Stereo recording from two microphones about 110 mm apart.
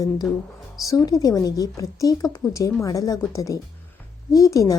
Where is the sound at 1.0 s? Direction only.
35° left (ahead or behind).